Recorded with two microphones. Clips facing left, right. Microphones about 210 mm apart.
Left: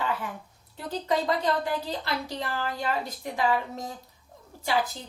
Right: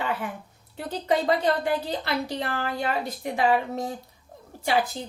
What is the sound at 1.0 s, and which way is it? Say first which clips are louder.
A woman's voice: right 3 dB; 65° right (ahead or behind).